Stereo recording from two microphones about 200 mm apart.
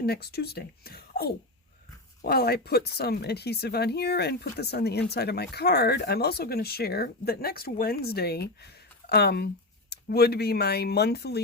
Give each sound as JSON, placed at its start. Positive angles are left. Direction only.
{"t": 0.0, "sound": "speech", "side_deg": 55}